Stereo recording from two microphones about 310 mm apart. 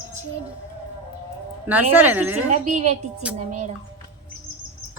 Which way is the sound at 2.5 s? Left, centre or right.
Right.